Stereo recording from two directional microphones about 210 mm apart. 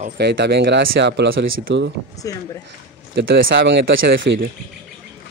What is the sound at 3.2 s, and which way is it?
Speech, 50° right (ahead or behind).